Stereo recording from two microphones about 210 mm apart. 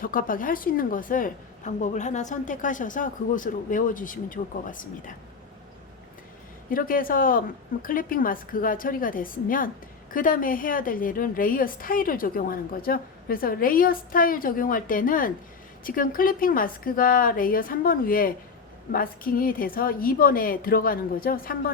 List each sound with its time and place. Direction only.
0.0 s a woman's voice: 40° left (ahead or behind)
6.7 s a woman's voice: 40° left (ahead or behind)